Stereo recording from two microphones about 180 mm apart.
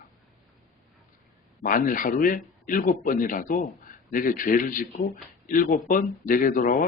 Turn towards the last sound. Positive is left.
turn(degrees=50)  # may be behind; listen again after turning